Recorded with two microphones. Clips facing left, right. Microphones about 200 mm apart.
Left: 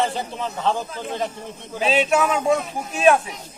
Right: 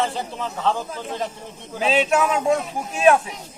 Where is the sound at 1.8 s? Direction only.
Centre (ahead or behind).